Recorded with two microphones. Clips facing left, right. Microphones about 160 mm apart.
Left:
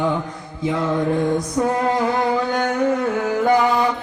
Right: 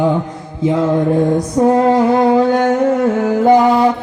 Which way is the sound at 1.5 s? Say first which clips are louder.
Right 10 dB; 35° right (ahead or behind).